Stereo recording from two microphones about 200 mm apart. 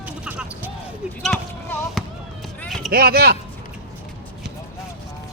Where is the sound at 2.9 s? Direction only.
50° right (ahead or behind).